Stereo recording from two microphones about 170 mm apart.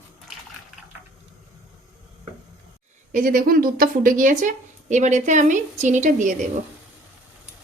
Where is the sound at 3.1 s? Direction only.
50° right (ahead or behind).